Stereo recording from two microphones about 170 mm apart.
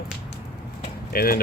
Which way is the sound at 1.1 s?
60° left (ahead or behind).